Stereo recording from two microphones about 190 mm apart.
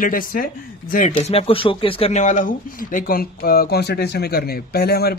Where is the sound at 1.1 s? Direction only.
30° left (ahead or behind).